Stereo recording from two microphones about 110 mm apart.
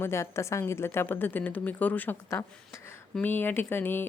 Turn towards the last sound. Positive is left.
turn(degrees=20)  # may be behind; listen again after turning